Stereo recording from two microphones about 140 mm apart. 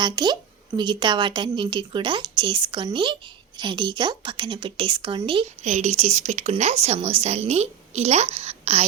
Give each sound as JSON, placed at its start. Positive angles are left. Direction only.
{"t": 0.0, "sound": "a woman's voice", "side_deg": -30}
{"t": 5.6, "sound": "a woman's voice", "side_deg": -55}